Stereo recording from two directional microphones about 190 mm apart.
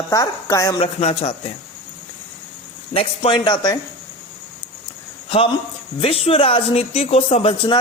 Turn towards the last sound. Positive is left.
turn(degrees=30)  # may be behind; listen again after turning